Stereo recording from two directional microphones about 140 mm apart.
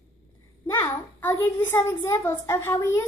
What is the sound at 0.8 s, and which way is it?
A child's voice, 15° left (ahead or behind).